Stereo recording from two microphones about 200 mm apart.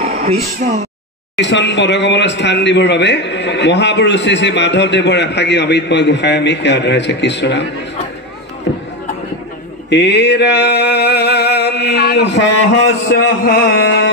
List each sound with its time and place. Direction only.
0.6 s speech: 35° right (ahead or behind)
1.3 s speech: 60° left (ahead or behind)
8.7 s a sound: 55° left (ahead or behind)
9.8 s speech: 60° left (ahead or behind)